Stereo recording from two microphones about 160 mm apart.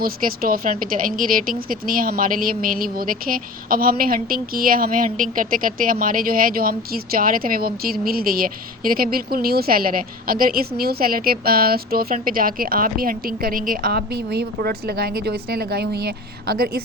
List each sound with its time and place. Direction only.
0.0 s a woman's voice: 65° right (ahead or behind)